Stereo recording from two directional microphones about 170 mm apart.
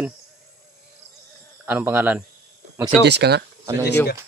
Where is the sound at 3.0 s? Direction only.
75° right (ahead or behind).